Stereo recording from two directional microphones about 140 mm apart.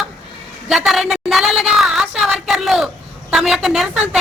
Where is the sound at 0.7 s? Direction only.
Centre (ahead or behind).